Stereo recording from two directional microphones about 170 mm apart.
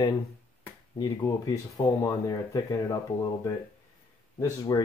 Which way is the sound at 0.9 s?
20° left (ahead or behind).